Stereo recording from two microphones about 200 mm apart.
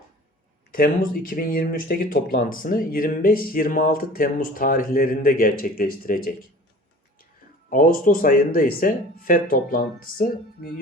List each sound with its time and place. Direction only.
0.7 s speech: 45° left (ahead or behind)
7.7 s speech: 45° left (ahead or behind)